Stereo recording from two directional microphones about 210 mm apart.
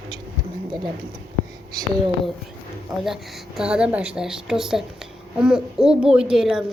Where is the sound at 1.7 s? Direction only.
20° right (ahead or behind).